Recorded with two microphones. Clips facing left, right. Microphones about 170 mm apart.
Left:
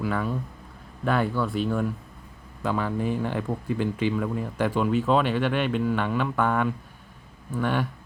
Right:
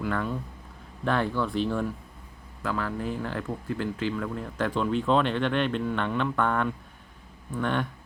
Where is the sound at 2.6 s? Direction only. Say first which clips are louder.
Left 4 dB; 15° left (ahead or behind).